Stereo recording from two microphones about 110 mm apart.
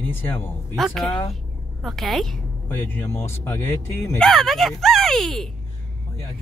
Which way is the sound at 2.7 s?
20° left (ahead or behind).